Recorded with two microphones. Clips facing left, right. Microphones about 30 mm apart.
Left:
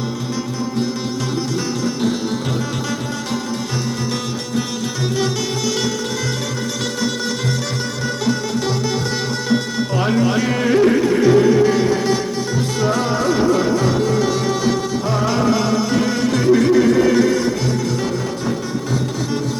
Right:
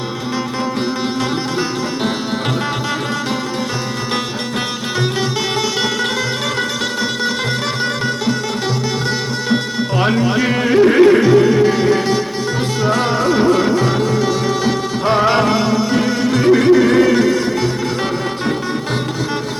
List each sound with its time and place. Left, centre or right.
1.8 s music: right
10.2 s a sound: right
10.9 s music: right
12.9 s music: right
13.2 s music: right
13.5 s music: right
15.0 s music: right
15.5 s music: right
16.4 s music: right